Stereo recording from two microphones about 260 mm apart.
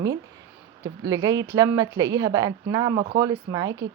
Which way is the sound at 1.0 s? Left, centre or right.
Centre.